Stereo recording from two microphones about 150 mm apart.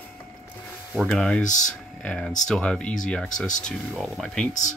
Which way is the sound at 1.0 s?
5° left (ahead or behind).